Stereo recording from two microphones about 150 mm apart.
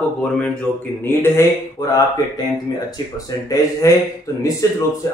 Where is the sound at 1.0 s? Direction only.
20° left (ahead or behind).